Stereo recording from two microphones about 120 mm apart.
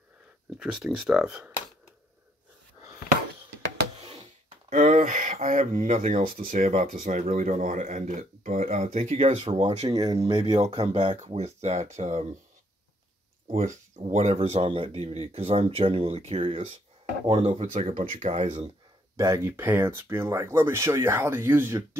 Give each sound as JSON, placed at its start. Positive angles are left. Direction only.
{"t": 0.6, "sound": "speech", "side_deg": -5}
{"t": 4.6, "sound": "speech", "side_deg": -90}
{"t": 9.9, "sound": "speech", "side_deg": -30}
{"t": 10.3, "sound": "speech", "side_deg": -50}
{"t": 11.2, "sound": "speech", "side_deg": -65}
{"t": 13.6, "sound": "speech", "side_deg": -85}
{"t": 14.7, "sound": "speech", "side_deg": -50}
{"t": 19.1, "sound": "speech", "side_deg": -25}